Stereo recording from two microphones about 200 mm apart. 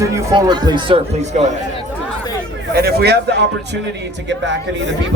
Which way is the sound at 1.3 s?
35° right (ahead or behind).